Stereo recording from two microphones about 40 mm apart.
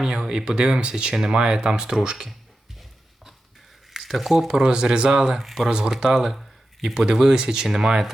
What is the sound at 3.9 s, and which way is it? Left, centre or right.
Speech, centre.